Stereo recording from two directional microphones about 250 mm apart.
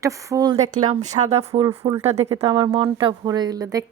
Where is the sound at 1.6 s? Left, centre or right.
Centre.